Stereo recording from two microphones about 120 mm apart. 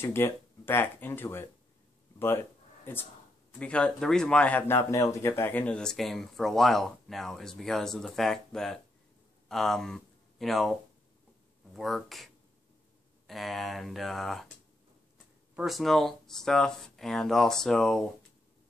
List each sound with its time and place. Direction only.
0.0 s speech: 20° left (ahead or behind)
2.1 s a sound: 20° left (ahead or behind)
3.5 s speech: 10° left (ahead or behind)
11.7 s speech: centre (ahead or behind)
13.3 s speech: centre (ahead or behind)
15.5 s speech: centre (ahead or behind)